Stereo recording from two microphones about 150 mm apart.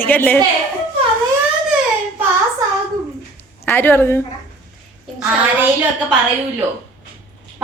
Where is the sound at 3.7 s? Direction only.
15° left (ahead or behind).